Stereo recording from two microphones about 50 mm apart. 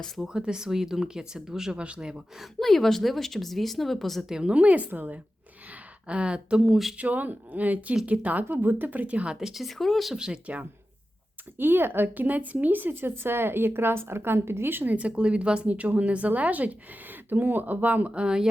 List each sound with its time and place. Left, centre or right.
0.3 s speech: centre
2.6 s speech: centre
4.3 s speech: centre
4.5 s speech: right
6.1 s a woman's voice: right
6.9 s speech: right
9.3 s speech: centre
10.2 s speech: centre
10.4 s a woman's voice: right
11.5 s speech: right
14.9 s a woman's voice: right
17.2 s speech: right; by 18.4 s centre